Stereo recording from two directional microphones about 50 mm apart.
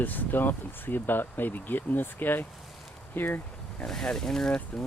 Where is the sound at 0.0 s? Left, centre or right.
Left.